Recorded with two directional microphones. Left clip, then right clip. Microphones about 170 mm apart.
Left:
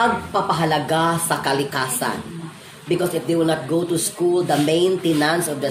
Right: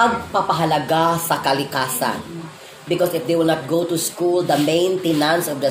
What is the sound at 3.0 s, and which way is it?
A woman's voice, 20° right (ahead or behind).